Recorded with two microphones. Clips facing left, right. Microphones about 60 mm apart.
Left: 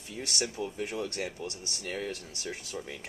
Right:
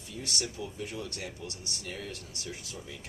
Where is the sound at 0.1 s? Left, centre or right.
Left.